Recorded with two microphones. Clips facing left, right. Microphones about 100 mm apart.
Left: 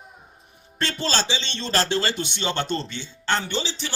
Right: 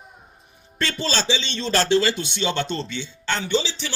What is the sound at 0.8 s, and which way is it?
Speech, 45° left (ahead or behind).